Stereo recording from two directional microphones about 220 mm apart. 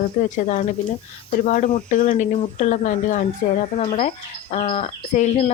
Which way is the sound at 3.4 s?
45° left (ahead or behind).